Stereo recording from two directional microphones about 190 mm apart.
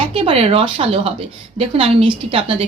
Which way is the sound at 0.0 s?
30° right (ahead or behind).